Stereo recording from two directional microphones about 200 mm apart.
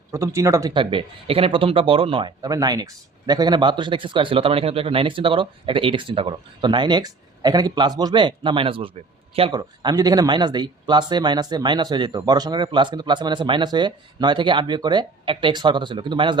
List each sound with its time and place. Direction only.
0.1 s speech: 15° right (ahead or behind)